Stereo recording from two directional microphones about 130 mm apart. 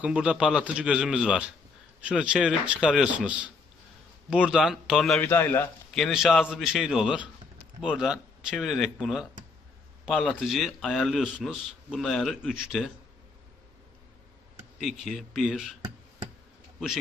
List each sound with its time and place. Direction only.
0.0 s a man's voice: 10° right (ahead or behind)
5.2 s a man's voice: 15° left (ahead or behind)
5.9 s a man's voice: centre (ahead or behind)
14.8 s a man's voice: centre (ahead or behind)